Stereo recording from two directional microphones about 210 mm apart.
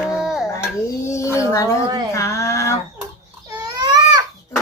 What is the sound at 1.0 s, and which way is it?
Speech, 15° left (ahead or behind).